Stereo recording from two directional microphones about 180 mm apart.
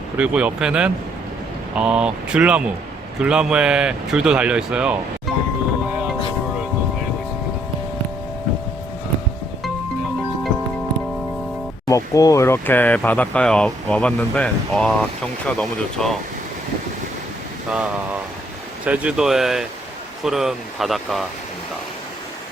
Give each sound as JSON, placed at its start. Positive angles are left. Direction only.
{"t": 0.2, "sound": "speech", "side_deg": -5}
{"t": 11.9, "sound": "speech", "side_deg": 20}
{"t": 17.7, "sound": "speech", "side_deg": -5}